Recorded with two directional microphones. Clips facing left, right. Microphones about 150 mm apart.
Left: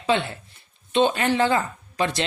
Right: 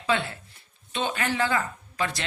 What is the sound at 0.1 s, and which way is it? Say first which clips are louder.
A man's voice: left 4 dB; 20° left (ahead or behind).